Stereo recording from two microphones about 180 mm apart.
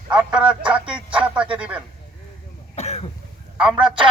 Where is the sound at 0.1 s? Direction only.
5° right (ahead or behind).